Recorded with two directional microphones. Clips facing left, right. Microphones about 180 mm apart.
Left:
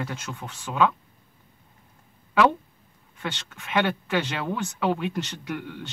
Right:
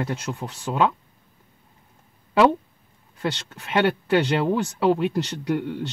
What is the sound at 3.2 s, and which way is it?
Speech, 35° right (ahead or behind).